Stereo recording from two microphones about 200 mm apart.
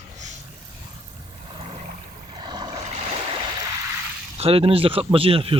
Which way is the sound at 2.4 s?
20° right (ahead or behind).